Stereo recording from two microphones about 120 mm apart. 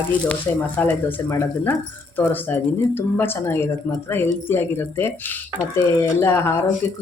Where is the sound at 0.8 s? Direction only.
15° left (ahead or behind).